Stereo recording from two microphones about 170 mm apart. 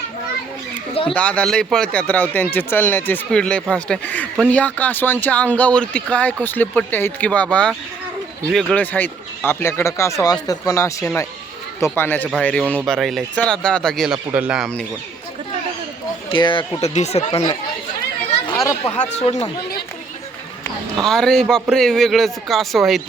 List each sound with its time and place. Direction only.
1.1 s speech: 5° left (ahead or behind)
16.3 s speech: 30° left (ahead or behind)
16.9 s speech: 40° left (ahead or behind)
18.5 s speech: 20° left (ahead or behind)
19.0 s speech: 40° left (ahead or behind)
21.0 s speech: centre (ahead or behind)